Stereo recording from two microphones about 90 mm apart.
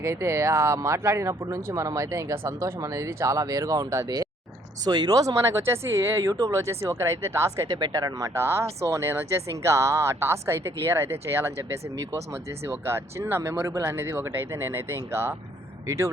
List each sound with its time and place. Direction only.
0.0 s speech: 30° right (ahead or behind)
4.9 s speech: 50° right (ahead or behind); by 7.7 s 35° right (ahead or behind)
7.7 s speech: 45° right (ahead or behind)
8.3 s speech: 30° right (ahead or behind)